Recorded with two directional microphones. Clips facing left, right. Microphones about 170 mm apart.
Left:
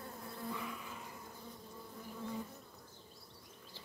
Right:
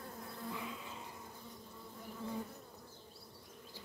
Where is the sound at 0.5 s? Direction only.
20° right (ahead or behind).